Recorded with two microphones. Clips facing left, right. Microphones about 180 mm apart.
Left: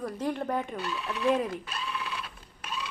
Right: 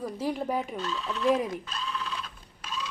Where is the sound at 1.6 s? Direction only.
5° left (ahead or behind).